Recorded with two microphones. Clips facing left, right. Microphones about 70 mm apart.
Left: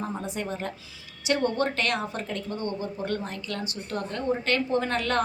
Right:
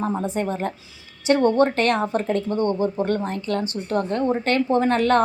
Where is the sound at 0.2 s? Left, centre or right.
Right.